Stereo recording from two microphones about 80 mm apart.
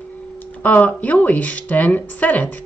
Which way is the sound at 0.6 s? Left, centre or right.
Centre.